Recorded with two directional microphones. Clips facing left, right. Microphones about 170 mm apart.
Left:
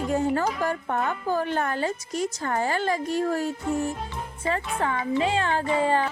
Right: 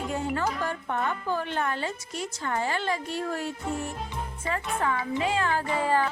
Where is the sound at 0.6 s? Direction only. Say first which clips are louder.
Left 3 dB; 45° left (ahead or behind).